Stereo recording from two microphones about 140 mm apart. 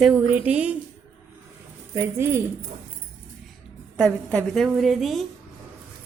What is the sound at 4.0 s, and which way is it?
A woman's voice, centre (ahead or behind).